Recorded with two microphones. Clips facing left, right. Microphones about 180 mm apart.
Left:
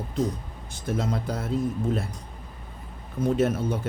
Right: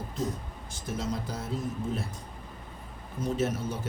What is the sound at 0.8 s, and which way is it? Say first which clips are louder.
Speech: left 5 dB; 60° left (ahead or behind).